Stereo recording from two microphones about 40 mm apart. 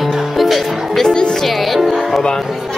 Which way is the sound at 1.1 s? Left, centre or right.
Centre.